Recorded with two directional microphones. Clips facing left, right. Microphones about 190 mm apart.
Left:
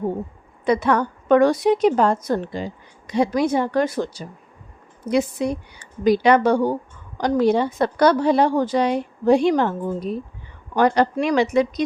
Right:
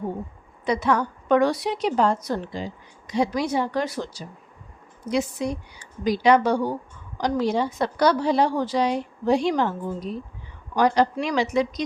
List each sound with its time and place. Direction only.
0.6 s a woman's voice: 55° left (ahead or behind)